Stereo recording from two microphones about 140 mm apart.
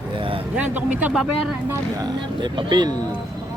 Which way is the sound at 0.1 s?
40° right (ahead or behind).